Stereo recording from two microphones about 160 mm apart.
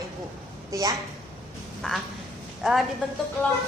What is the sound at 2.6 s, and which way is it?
Speech, centre (ahead or behind).